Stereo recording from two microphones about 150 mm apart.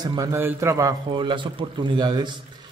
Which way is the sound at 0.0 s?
25° right (ahead or behind).